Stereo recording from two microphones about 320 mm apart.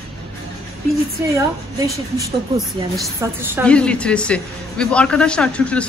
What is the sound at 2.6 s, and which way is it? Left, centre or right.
A man's voice, centre.